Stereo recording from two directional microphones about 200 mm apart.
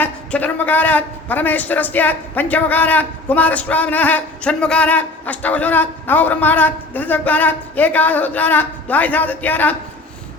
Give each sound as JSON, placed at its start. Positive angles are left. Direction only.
{"t": 0.0, "sound": "a man's voice", "side_deg": 10}